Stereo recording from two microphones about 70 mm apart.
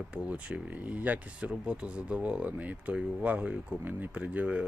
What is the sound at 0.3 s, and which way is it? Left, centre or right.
Speech, right.